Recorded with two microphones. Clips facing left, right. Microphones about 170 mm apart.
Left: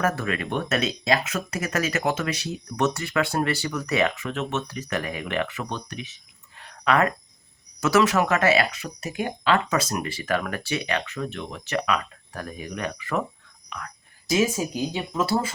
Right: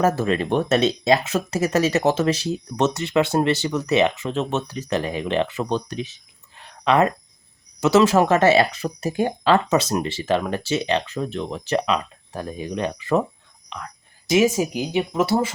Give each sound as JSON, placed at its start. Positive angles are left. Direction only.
{"t": 0.0, "sound": "speech", "side_deg": -30}
{"t": 6.6, "sound": "a sound", "side_deg": -25}
{"t": 7.8, "sound": "speech", "side_deg": -25}
{"t": 13.7, "sound": "whispering", "side_deg": -20}
{"t": 14.8, "sound": "speech", "side_deg": -20}